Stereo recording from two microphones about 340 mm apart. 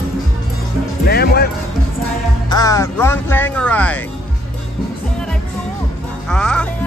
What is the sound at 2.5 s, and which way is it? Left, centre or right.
Speech, centre.